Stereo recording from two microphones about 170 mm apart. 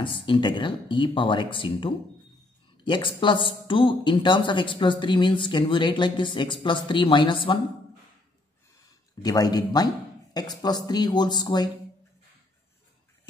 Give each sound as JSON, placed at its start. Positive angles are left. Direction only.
{"t": 0.0, "sound": "speech", "side_deg": 30}
{"t": 9.2, "sound": "speech", "side_deg": 20}